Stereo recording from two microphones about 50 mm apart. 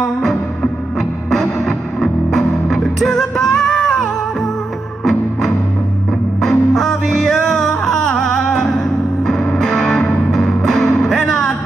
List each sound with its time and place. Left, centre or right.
1.3 s music: centre
6.4 s music: centre
9.8 s music: left
10.3 s music: centre